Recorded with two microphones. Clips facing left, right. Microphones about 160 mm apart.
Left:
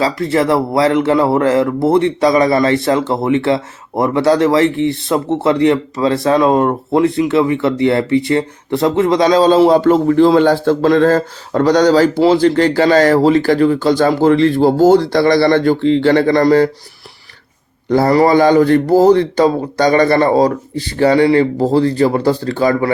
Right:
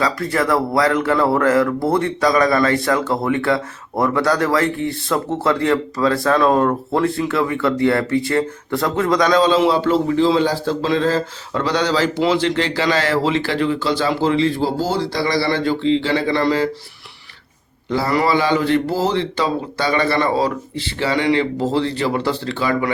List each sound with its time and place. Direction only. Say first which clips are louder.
0.0 s speech: left 5 dB; 25° left (ahead or behind)
9.4 s a man's voice: left 6 dB; 40° left (ahead or behind)
17.8 s a man's voice: left 7 dB; 45° left (ahead or behind)